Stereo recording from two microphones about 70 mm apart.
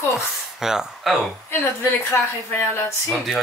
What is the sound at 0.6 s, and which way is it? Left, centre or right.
Speech, centre.